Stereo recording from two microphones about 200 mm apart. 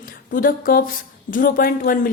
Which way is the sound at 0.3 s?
45° left (ahead or behind).